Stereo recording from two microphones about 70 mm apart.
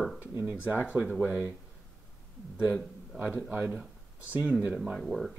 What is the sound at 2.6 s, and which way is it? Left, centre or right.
A man's voice, centre.